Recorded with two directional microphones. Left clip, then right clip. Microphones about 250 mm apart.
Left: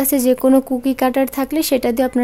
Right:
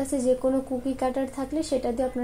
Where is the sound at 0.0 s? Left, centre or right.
Left.